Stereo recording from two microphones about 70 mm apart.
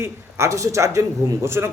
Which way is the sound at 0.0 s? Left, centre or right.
Right.